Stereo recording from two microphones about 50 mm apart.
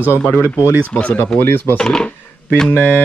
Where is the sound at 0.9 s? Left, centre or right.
Left.